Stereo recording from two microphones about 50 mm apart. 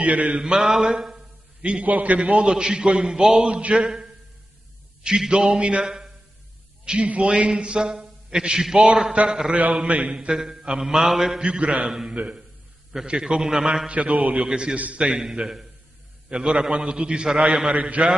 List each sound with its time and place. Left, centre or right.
0.0 s a man's voice: right
0.6 s a man's voice: centre
1.6 s a man's voice: right
3.8 s a man's voice: centre
5.6 s a man's voice: right
9.8 s a man's voice: right
10.1 s a man's voice: centre
11.4 s a man's voice: right
13.8 s a man's voice: right
14.4 s a man's voice: centre
14.8 s a man's voice: right
15.0 s a man's voice: centre
17.6 s a man's voice: right